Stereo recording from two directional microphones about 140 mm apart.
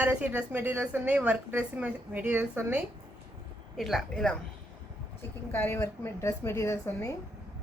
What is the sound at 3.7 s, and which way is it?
Speech, centre (ahead or behind).